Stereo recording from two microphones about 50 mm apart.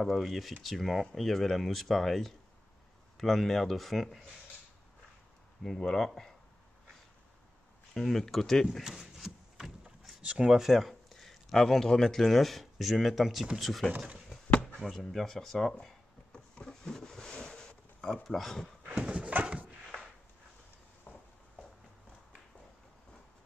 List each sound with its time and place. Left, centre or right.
0.1 s speech: centre
5.6 s speech: centre
7.9 s speech: centre
8.8 s a sound: centre
10.4 s speech: centre
10.7 s speech: centre
14.5 s a sound: left
14.8 s speech: centre
15.8 s a sound: centre
18.0 s speech: centre
18.9 s dog: right